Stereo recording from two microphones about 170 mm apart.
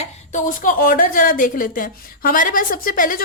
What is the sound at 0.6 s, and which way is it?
A woman's voice, 55° left (ahead or behind).